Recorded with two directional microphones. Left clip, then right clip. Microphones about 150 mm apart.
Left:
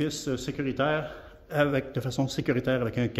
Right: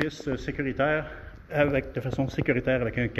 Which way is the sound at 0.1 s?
30° left (ahead or behind).